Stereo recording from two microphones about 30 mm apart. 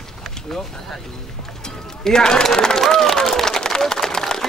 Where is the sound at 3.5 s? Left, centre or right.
Centre.